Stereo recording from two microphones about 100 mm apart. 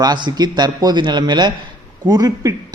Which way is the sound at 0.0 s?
45° right (ahead or behind).